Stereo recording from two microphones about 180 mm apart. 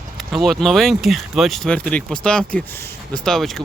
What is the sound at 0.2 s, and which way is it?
Speech, centre (ahead or behind).